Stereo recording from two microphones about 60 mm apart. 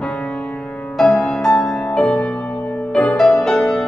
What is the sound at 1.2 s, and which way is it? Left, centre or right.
Music, centre.